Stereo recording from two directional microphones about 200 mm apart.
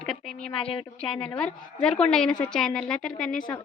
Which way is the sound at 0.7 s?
25° left (ahead or behind).